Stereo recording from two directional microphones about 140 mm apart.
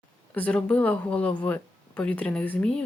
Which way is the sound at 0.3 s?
10° left (ahead or behind).